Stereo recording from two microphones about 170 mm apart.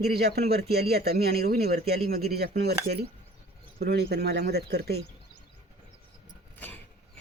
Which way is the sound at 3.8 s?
70° right (ahead or behind).